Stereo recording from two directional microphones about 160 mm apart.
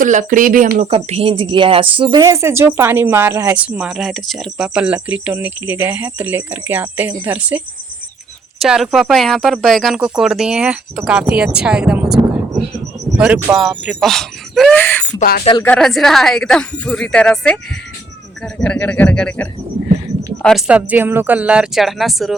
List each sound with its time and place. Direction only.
0.0 s speech: 55° right (ahead or behind)
0.9 s speech: 40° right (ahead or behind); by 12.0 s 5° right (ahead or behind)
13.1 s speech: 5° right (ahead or behind)
14.8 s speech: 10° left (ahead or behind)
15.2 s speech: 70° left (ahead or behind)
15.6 s speech: 5° left (ahead or behind)
18.6 s speech: 10° left (ahead or behind)
20.7 s speech: 10° right (ahead or behind)